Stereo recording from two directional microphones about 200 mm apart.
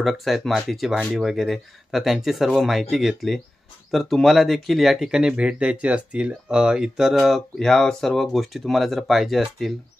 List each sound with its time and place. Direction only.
0.0 s speech: centre (ahead or behind)